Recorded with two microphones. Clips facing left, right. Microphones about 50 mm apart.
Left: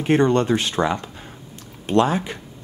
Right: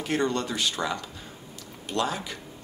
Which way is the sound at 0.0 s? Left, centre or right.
Left.